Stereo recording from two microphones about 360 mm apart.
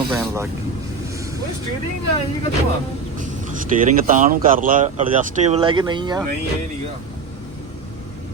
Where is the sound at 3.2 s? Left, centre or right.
Right.